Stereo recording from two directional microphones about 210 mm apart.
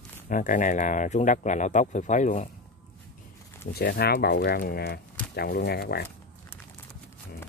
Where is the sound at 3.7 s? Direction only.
50° left (ahead or behind).